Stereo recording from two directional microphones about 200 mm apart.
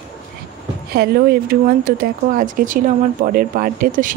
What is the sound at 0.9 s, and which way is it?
A woman's voice, 50° right (ahead or behind).